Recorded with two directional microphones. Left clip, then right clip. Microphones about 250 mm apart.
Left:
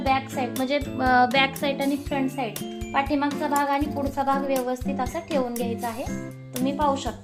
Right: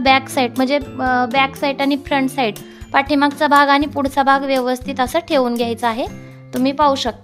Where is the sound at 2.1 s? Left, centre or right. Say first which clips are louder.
Right 10 dB; right.